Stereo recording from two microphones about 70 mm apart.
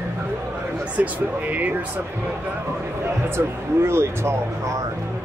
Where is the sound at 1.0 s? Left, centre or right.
Right.